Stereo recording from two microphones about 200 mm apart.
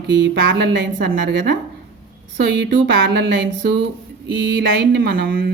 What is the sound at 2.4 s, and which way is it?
Speech, 60° right (ahead or behind).